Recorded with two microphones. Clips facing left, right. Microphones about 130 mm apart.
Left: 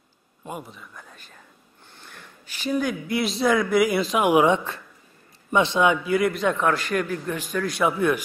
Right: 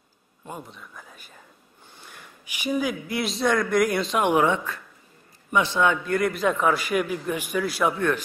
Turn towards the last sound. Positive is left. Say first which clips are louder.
# even
turn(degrees=-5)  # may be behind; listen again after turning